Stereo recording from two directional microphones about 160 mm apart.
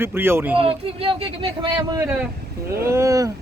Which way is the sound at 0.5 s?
35° right (ahead or behind).